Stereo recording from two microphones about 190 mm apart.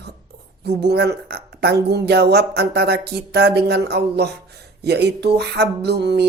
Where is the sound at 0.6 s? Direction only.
60° right (ahead or behind).